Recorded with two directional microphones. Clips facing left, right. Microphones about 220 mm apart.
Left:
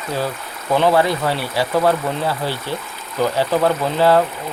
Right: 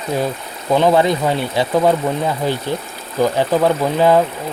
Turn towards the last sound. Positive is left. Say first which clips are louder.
# right 2 dB
turn(degrees=-15)  # may be behind; listen again after turning